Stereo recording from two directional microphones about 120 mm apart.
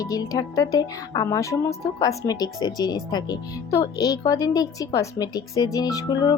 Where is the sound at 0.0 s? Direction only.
30° left (ahead or behind).